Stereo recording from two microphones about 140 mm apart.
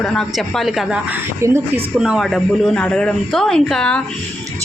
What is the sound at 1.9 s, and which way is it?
A man's voice, 5° right (ahead or behind).